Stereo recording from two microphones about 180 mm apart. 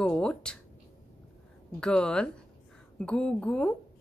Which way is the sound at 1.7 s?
5° left (ahead or behind).